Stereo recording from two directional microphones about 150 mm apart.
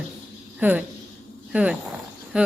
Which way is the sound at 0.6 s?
10° right (ahead or behind).